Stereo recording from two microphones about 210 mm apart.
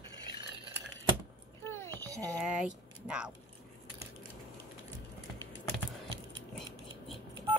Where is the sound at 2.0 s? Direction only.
15° right (ahead or behind).